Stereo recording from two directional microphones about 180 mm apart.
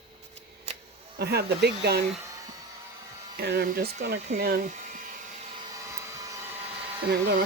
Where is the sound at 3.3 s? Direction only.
60° right (ahead or behind); by 5.0 s 45° right (ahead or behind).